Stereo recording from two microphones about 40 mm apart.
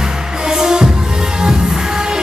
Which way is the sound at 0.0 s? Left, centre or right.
Centre.